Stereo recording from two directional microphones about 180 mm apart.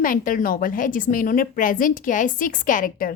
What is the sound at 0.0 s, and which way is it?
A woman's voice, 50° left (ahead or behind).